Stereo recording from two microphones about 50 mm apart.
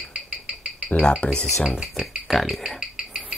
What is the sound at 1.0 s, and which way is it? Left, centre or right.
Speech, left.